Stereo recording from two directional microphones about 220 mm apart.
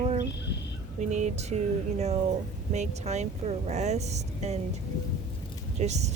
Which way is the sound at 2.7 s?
30° right (ahead or behind).